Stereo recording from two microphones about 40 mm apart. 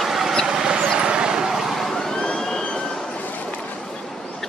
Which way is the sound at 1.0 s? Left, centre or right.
Right.